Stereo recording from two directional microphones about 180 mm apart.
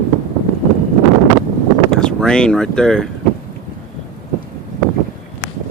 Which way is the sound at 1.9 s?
5° left (ahead or behind).